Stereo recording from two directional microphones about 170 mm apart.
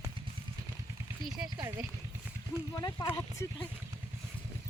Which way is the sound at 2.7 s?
25° left (ahead or behind).